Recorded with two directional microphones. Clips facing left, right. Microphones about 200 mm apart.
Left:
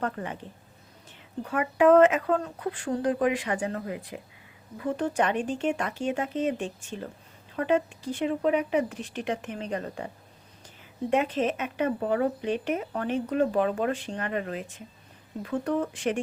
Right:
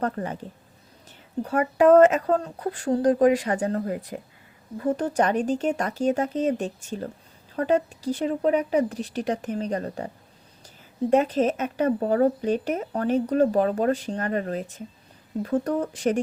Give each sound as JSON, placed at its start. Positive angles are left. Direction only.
{"t": 0.0, "sound": "speech", "side_deg": -40}
{"t": 1.4, "sound": "speech", "side_deg": -40}
{"t": 11.1, "sound": "speech", "side_deg": -40}